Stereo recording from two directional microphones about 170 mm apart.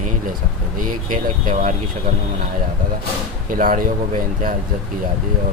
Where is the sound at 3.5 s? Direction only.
55° right (ahead or behind).